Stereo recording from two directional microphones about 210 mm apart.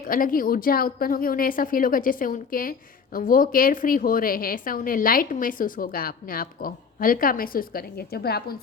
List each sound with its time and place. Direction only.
0.1 s a woman's voice: 40° left (ahead or behind)